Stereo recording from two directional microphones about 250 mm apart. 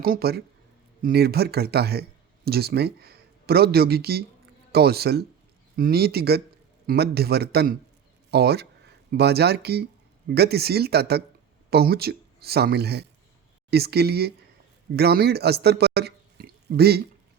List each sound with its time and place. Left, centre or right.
0.0 s a man's voice: right